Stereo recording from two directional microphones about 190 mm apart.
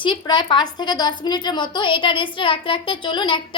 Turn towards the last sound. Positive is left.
turn(degrees=25)  # may be behind; listen again after turning